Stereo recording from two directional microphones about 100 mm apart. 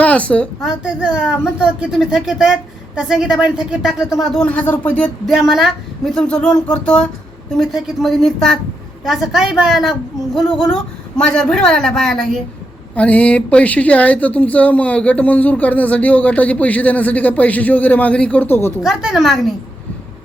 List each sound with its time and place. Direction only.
0.0 s a woman's voice: 15° left (ahead or behind)
0.9 s speech: 10° right (ahead or behind)
4.4 s speech: 15° left (ahead or behind)
5.2 s speech: centre (ahead or behind)
7.5 s a woman's voice: centre (ahead or behind)
11.2 s speech: 10° left (ahead or behind)
18.8 s a woman's voice: 5° right (ahead or behind)